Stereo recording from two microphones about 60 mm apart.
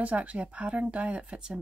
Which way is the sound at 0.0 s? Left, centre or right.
Right.